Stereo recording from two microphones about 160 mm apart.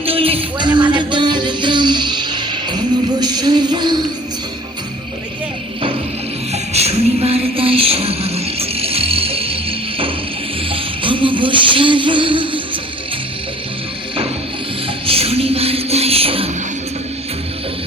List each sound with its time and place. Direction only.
0.0 s music: 35° right (ahead or behind)
6.5 s music: 40° right (ahead or behind)
15.0 s music: 40° right (ahead or behind)